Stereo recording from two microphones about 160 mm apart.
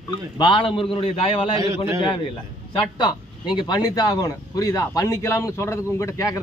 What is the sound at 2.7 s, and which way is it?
Speech, 30° left (ahead or behind).